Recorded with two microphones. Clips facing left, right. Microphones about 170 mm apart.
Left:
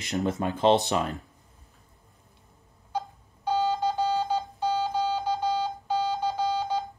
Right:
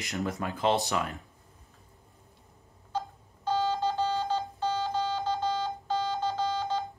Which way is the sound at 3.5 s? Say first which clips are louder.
Left 2 dB; 15° left (ahead or behind).